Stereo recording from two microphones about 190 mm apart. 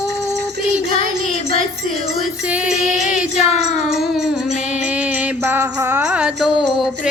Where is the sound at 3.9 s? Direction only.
Centre (ahead or behind).